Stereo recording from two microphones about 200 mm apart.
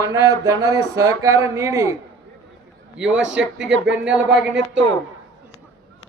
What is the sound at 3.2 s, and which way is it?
Speech, 65° right (ahead or behind).